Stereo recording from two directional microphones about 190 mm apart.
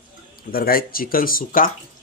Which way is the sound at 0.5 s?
50° left (ahead or behind).